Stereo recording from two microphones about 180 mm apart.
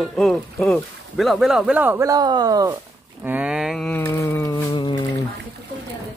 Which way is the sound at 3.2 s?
10° right (ahead or behind).